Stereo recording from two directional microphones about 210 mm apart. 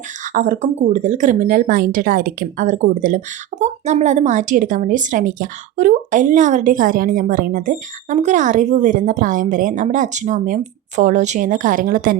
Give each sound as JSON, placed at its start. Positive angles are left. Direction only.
{"t": 0.3, "sound": "speech", "side_deg": -35}